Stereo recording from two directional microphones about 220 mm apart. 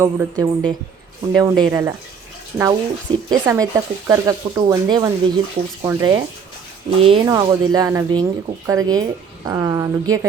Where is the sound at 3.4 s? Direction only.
15° right (ahead or behind).